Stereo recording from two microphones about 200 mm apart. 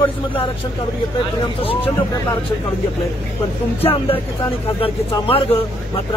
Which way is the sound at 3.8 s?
25° left (ahead or behind).